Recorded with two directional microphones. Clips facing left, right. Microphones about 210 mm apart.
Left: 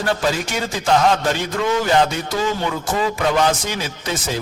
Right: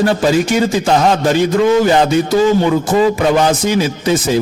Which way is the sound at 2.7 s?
25° right (ahead or behind).